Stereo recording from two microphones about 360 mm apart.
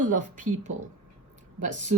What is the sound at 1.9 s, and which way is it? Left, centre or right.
Speech, centre.